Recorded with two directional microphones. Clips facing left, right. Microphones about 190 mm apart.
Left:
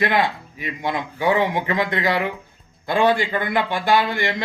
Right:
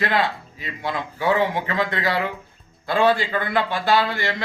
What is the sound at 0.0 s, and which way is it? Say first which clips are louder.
A man's voice: left 2 dB; 15° left (ahead or behind).